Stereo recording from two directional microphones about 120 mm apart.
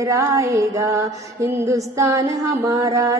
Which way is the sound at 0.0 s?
30° right (ahead or behind).